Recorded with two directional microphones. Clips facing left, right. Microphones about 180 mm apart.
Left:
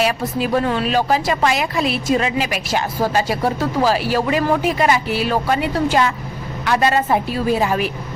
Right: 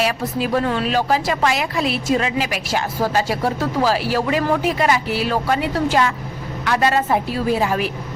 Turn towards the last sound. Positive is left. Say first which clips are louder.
# left 1 dB
turn(degrees=20)  # may be behind; listen again after turning